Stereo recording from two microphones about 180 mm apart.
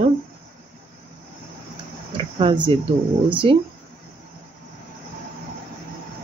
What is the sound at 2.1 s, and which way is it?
Speech, 25° right (ahead or behind).